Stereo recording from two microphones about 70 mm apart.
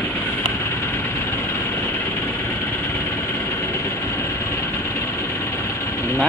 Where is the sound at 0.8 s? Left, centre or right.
Left.